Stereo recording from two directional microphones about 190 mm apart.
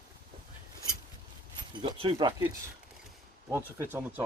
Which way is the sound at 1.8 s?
30° right (ahead or behind).